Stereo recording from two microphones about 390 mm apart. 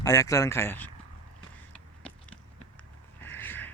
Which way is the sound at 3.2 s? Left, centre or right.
Centre.